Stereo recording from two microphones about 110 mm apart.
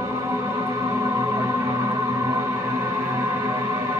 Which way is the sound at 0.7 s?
25° right (ahead or behind).